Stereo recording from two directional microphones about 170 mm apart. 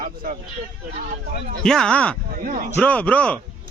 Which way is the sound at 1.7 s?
5° left (ahead or behind).